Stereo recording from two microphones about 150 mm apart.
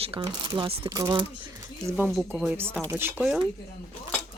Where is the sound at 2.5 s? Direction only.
15° right (ahead or behind).